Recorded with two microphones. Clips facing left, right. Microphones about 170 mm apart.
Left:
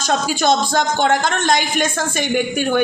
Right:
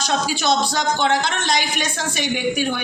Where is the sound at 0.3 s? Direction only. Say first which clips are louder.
Left 3 dB; 50° left (ahead or behind).